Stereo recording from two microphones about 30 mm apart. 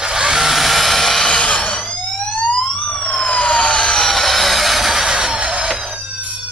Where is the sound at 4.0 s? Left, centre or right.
Centre; by 5.3 s right.